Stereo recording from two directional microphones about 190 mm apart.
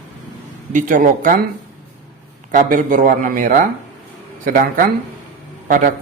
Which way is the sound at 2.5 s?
45° right (ahead or behind).